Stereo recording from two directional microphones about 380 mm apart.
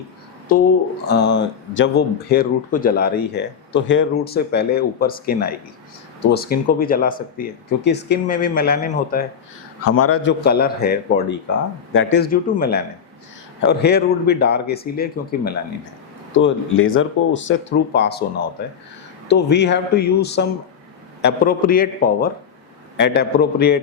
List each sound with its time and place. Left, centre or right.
1.0 s speech: left
9.8 s speech: left
19.3 s speech: left